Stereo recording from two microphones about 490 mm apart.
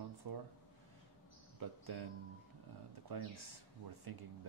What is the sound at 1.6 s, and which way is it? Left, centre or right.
Speech, right.